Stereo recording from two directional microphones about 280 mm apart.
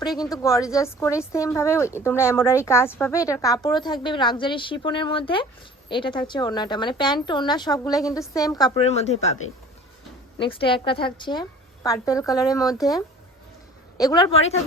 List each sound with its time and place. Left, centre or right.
0.0 s a woman's voice: centre
10.3 s speech: centre
14.0 s speech: centre